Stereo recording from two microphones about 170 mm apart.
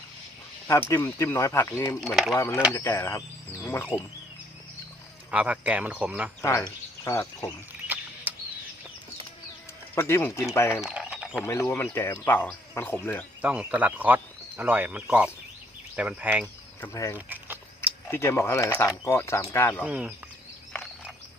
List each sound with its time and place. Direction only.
0.7 s speech: 15° left (ahead or behind)
2.0 s speech: centre (ahead or behind)
2.3 s speech: 15° left (ahead or behind)
5.3 s speech: 5° right (ahead or behind)
7.0 s speech: 15° left (ahead or behind)
8.3 s a sound: 10° right (ahead or behind)
9.9 s speech: 15° left (ahead or behind)
10.8 s a sound: 5° right (ahead or behind)
11.4 s speech: 15° left (ahead or behind)
13.4 s speech: 10° right (ahead or behind)
16.8 s speech: 20° left (ahead or behind)
17.2 s a sound: 10° right (ahead or behind)
17.7 s speech: 15° left (ahead or behind)
19.8 s speech: 5° right (ahead or behind)